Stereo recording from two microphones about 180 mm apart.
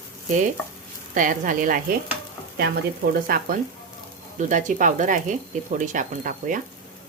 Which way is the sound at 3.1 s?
55° right (ahead or behind).